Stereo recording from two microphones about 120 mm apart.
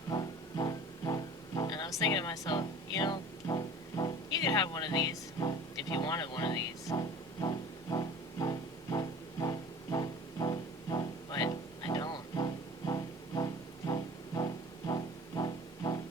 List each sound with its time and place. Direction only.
0.1 s music: 35° left (ahead or behind)